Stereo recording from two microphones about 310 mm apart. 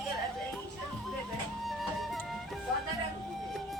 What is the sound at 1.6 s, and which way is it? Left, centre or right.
Music, centre.